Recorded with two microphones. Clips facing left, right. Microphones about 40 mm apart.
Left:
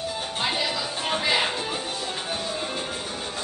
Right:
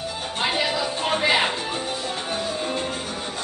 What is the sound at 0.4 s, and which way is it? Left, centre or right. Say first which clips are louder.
Music: right 4 dB; centre.